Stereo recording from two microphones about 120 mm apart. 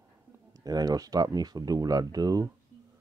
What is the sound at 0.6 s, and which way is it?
Speech, 30° right (ahead or behind).